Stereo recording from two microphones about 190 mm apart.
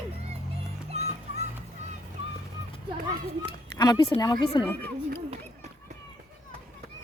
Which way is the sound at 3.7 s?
20° left (ahead or behind).